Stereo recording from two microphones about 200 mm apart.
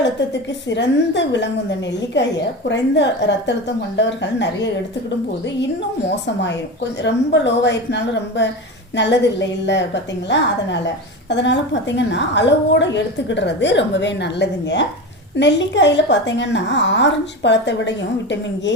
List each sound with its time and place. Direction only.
0.7 s a woman's voice: 60° left (ahead or behind)
2.6 s a woman's voice: 65° left (ahead or behind)
6.2 s a woman's voice: 60° left (ahead or behind)